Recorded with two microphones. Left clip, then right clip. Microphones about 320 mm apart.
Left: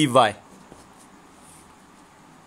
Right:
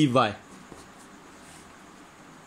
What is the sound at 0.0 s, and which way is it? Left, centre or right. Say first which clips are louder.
Speech: left 5 dB; left.